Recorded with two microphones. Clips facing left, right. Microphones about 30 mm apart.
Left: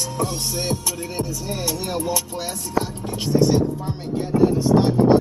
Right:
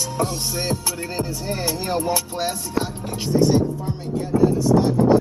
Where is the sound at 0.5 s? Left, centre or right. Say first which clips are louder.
Even; centre.